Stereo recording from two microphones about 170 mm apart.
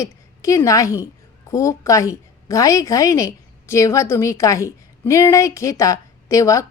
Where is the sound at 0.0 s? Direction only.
20° left (ahead or behind).